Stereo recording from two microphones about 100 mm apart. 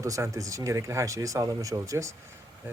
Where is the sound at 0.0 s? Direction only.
30° right (ahead or behind).